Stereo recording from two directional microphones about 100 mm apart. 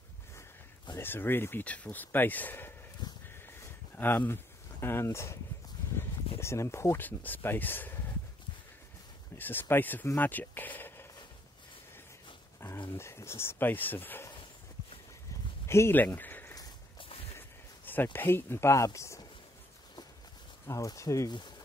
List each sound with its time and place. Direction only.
0.9 s speech: 20° left (ahead or behind)
3.3 s a sound: 20° left (ahead or behind)
5.9 s speech: 25° left (ahead or behind)
9.4 s speech: 20° left (ahead or behind)
12.5 s dog: 25° left (ahead or behind)
12.9 s speech: 25° left (ahead or behind)
15.6 s speech: 25° left (ahead or behind)
16.0 s a sound: 20° left (ahead or behind)
17.4 s speech: 20° left (ahead or behind)
20.6 s speech: 35° left (ahead or behind)
21.3 s speech: 50° left (ahead or behind)